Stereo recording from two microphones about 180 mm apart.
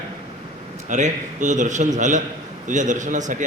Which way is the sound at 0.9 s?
45° right (ahead or behind).